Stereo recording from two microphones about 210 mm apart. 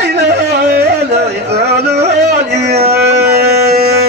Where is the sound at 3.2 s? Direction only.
50° right (ahead or behind).